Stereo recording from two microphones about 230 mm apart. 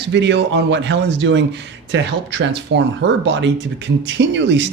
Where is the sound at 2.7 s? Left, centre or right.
Right.